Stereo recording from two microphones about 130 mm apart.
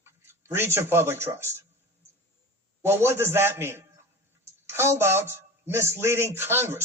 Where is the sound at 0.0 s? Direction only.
20° right (ahead or behind).